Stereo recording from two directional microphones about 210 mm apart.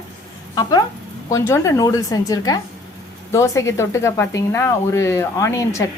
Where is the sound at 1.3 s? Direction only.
15° left (ahead or behind).